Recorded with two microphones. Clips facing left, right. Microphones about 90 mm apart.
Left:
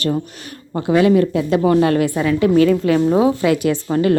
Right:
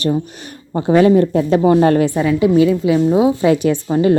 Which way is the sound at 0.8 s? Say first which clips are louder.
Right 2 dB; 30° right (ahead or behind).